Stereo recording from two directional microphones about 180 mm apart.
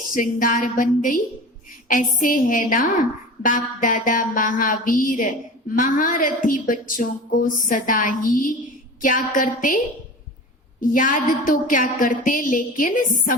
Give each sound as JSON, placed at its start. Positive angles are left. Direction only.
{"t": 0.1, "sound": "a woman's voice", "side_deg": 50}